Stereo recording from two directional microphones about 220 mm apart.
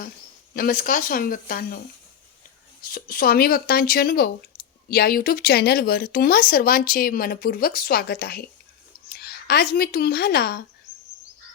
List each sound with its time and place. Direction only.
0.5 s speech: 40° left (ahead or behind)
2.8 s speech: 40° left (ahead or behind)
4.5 s clicking: 40° left (ahead or behind)
4.9 s a woman's voice: 45° left (ahead or behind)